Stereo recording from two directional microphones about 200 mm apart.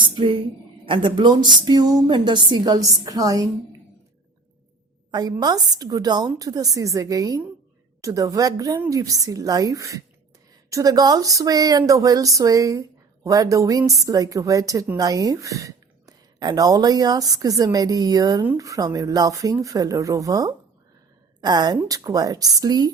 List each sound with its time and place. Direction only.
0.0 s a sound: 25° right (ahead or behind)
0.9 s a woman's voice: 25° right (ahead or behind)
5.1 s a woman's voice: 20° right (ahead or behind)